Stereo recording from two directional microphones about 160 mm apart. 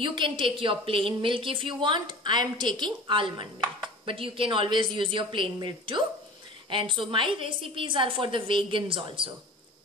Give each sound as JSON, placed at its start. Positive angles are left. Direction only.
{"t": 0.0, "sound": "a woman's voice", "side_deg": -30}